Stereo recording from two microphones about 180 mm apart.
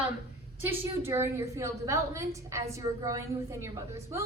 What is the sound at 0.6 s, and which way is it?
A woman's voice, 15° right (ahead or behind).